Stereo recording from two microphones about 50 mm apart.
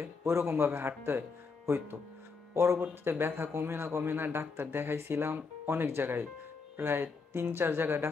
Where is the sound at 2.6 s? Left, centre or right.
Right.